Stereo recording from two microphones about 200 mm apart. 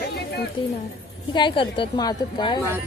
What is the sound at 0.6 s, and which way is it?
Speech, 25° left (ahead or behind).